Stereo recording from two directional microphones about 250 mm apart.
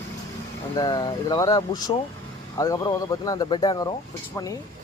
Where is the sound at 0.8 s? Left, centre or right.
Centre.